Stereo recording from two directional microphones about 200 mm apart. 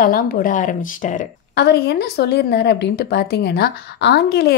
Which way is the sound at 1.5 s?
55° left (ahead or behind).